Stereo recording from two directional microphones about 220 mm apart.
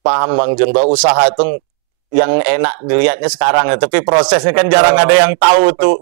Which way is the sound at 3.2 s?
25° right (ahead or behind).